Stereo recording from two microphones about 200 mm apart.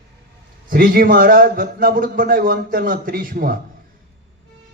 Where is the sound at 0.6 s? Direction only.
45° right (ahead or behind).